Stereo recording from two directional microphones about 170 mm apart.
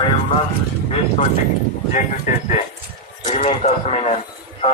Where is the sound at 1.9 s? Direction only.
45° left (ahead or behind).